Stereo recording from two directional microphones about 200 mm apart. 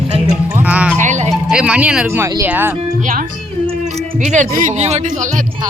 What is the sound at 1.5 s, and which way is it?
Speech, 5° right (ahead or behind).